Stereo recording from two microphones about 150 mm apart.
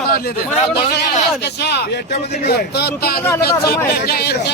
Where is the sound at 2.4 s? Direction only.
90° left.